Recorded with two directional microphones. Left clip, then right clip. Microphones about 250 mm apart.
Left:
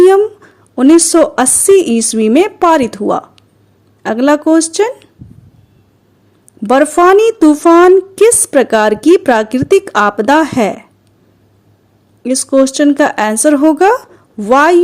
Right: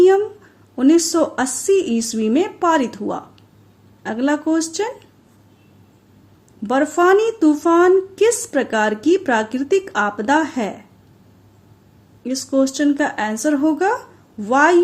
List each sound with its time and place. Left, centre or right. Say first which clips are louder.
0.0 s a woman's voice: left 7 dB; left
6.6 s speech: left 8 dB; left
12.2 s speech: left 9 dB; left